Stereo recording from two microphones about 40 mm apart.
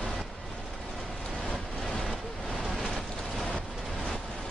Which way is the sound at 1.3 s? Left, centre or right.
Left.